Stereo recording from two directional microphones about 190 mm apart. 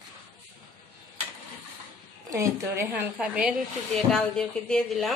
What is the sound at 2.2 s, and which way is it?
A woman's voice, 15° right (ahead or behind).